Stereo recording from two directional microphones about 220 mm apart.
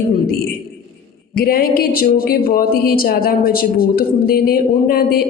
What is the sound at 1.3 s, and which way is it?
Speech, 40° left (ahead or behind).